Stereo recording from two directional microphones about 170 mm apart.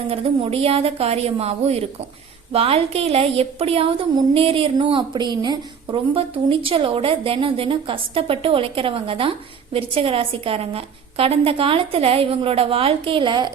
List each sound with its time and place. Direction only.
0.1 s a woman's voice: 35° right (ahead or behind)